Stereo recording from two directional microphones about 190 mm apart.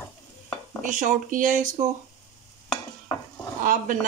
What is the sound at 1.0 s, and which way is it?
Speech, 45° right (ahead or behind).